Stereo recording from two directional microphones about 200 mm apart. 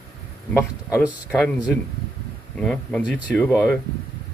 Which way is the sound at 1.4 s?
Centre (ahead or behind).